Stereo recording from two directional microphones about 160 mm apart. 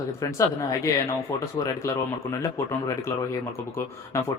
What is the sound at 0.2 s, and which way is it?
A man's voice, 20° left (ahead or behind).